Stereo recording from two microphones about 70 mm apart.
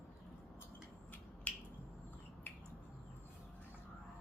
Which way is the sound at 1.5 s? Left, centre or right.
Left.